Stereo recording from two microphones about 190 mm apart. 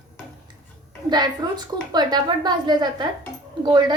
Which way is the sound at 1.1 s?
20° right (ahead or behind).